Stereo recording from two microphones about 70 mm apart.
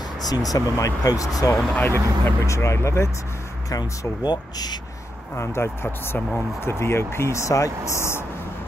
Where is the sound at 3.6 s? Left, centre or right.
Left.